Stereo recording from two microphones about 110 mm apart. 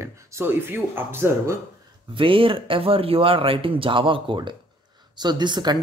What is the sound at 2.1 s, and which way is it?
Speech, 55° right (ahead or behind).